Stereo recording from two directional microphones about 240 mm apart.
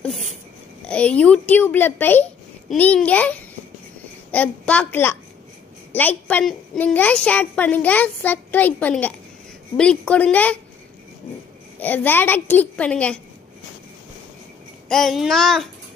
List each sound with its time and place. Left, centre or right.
0.8 s a woman's voice: centre
11.8 s a woman's voice: centre
14.9 s a woman's voice: centre